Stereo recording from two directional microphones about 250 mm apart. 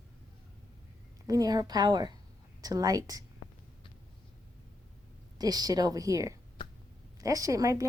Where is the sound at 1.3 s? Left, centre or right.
Centre.